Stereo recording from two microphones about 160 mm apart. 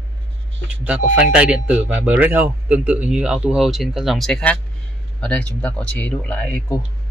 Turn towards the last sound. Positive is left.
turn(degrees=15)  # may be behind; listen again after turning